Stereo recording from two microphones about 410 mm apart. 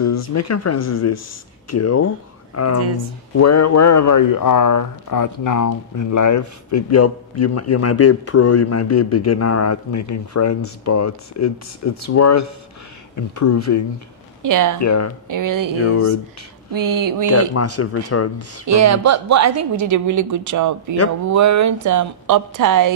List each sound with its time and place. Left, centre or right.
0.0 s speech: left
14.4 s a woman's voice: right
14.8 s speech: left
15.2 s a woman's voice: right
16.7 s a woman's voice: right
17.3 s speech: left
18.7 s a woman's voice: right